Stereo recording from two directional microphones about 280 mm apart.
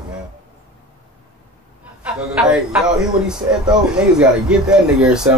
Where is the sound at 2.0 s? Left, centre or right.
Centre.